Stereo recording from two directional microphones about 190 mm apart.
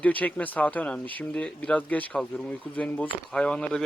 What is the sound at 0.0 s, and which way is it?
Speech, 10° left (ahead or behind).